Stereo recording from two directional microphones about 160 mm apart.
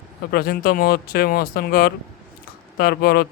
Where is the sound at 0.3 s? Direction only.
70° left (ahead or behind).